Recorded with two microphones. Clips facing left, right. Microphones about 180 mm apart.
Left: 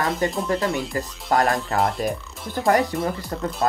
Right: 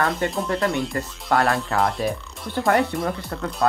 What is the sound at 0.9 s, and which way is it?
Speech, 35° left (ahead or behind).